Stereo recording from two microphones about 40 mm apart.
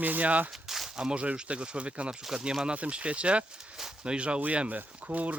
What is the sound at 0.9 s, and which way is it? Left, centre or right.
Speech, centre.